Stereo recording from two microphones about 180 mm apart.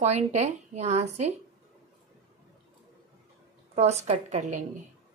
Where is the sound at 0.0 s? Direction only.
40° right (ahead or behind).